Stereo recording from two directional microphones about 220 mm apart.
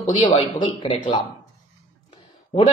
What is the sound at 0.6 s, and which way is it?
Speech, 20° left (ahead or behind).